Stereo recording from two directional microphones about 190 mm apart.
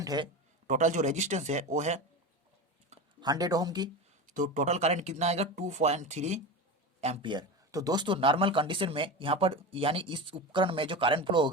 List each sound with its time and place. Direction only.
0.0 s a man's voice: 20° right (ahead or behind)
0.7 s speech: 40° right (ahead or behind)
3.2 s speech: 20° right (ahead or behind)
4.3 s speech: 40° right (ahead or behind); by 11.5 s 25° right (ahead or behind)